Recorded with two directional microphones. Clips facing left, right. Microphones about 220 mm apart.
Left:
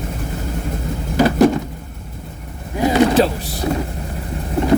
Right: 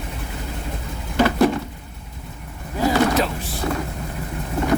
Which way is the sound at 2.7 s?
20° left (ahead or behind).